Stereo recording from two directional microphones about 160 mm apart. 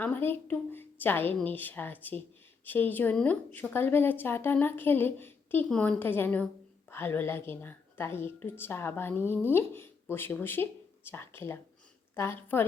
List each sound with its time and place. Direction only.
0.0 s a woman's voice: 10° left (ahead or behind)